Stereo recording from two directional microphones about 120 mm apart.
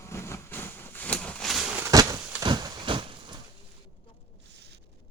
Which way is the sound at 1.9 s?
30° right (ahead or behind).